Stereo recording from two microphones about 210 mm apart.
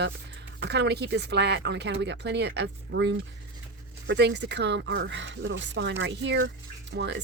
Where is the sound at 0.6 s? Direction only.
55° right (ahead or behind).